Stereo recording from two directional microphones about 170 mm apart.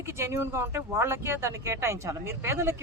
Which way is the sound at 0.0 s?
15° right (ahead or behind).